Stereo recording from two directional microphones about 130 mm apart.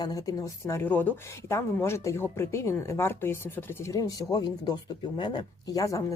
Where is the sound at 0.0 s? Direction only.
30° left (ahead or behind).